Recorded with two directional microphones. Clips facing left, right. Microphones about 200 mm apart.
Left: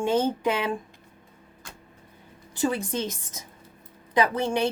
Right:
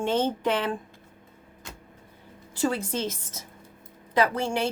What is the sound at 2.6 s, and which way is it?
Speech, 15° left (ahead or behind).